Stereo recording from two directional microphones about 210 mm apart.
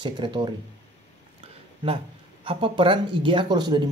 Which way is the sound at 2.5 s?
25° right (ahead or behind).